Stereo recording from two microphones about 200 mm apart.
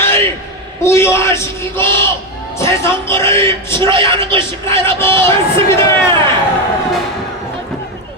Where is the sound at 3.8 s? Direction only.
25° right (ahead or behind).